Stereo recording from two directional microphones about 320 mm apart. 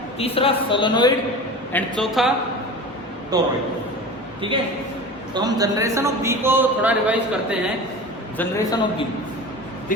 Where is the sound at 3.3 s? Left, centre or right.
Centre.